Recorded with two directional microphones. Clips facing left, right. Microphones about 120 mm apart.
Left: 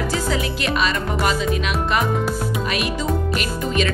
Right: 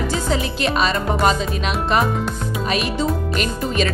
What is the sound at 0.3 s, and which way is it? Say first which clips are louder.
Speech: right 2 dB; 30° right (ahead or behind).